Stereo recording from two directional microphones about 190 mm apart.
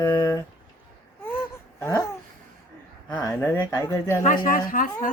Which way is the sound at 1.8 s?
15° left (ahead or behind).